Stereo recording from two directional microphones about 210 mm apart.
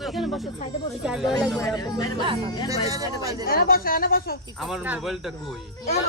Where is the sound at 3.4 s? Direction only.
45° left (ahead or behind).